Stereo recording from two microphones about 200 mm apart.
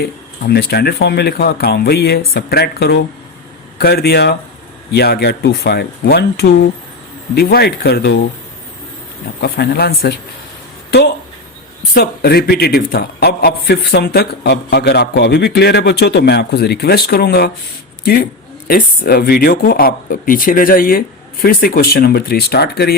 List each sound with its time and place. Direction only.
0.0 s a man's voice: 55° left (ahead or behind)
9.4 s a man's voice: 55° left (ahead or behind)
11.9 s a man's voice: 50° left (ahead or behind)